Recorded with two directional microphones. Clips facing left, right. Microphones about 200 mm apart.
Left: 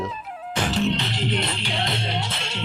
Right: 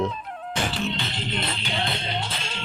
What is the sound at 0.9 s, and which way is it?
Music, 80° left.